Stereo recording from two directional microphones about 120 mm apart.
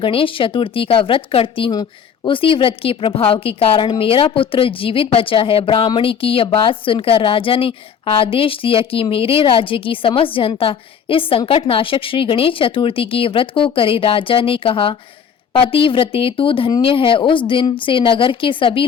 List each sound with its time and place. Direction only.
0.0 s a woman's voice: 45° left (ahead or behind)
1.7 s a woman's voice: 40° left (ahead or behind)